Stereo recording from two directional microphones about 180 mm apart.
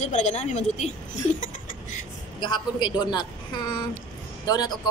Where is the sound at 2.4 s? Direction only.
25° left (ahead or behind).